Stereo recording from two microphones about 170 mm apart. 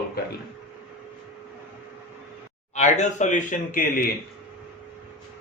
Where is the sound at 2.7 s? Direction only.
45° left (ahead or behind).